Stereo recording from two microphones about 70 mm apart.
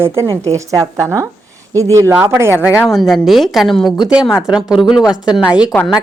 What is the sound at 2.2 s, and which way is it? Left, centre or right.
Speech, right.